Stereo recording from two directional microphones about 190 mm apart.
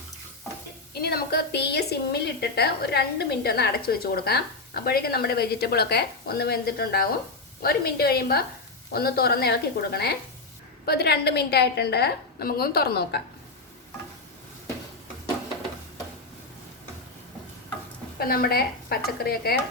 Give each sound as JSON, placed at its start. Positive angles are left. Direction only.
{"t": 1.0, "sound": "a woman's voice", "side_deg": 55}
{"t": 18.2, "sound": "a woman's voice", "side_deg": 55}